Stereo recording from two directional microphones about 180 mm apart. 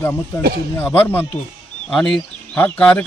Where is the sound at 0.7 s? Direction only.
10° left (ahead or behind).